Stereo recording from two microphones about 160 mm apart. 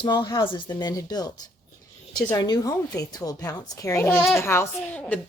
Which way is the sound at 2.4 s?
25° left (ahead or behind).